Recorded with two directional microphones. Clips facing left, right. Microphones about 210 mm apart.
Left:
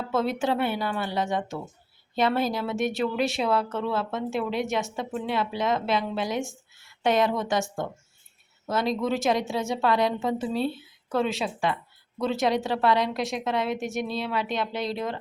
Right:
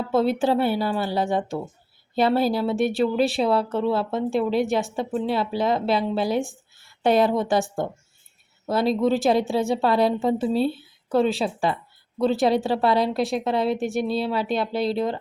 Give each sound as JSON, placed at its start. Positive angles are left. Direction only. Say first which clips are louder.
{"t": 0.1, "sound": "speech", "louder": "right 5 dB", "side_deg": -30}